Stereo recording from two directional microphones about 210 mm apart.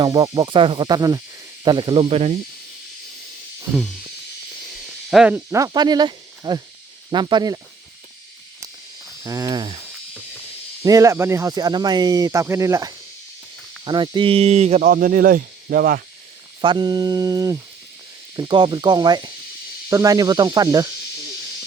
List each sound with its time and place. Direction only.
0.0 s cricket: 20° right (ahead or behind)
4.8 s speech: centre (ahead or behind); by 6.6 s 20° right (ahead or behind)
7.1 s cricket: 20° right (ahead or behind)
9.2 s speech: 15° right (ahead or behind)
10.8 s speech: 15° right (ahead or behind); by 16.0 s 45° right (ahead or behind)
16.6 s speech: 20° right (ahead or behind)
18.3 s cricket: 20° right (ahead or behind)
19.9 s speech: 15° right (ahead or behind)